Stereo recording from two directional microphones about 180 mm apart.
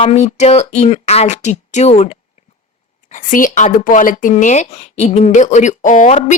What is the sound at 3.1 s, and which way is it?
Speech, 50° left (ahead or behind).